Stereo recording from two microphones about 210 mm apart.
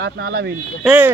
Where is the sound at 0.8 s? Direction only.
10° right (ahead or behind).